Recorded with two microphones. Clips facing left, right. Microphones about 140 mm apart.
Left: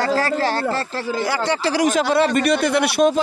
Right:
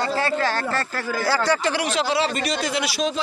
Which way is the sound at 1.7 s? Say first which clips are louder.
Left 5 dB; 45° left (ahead or behind).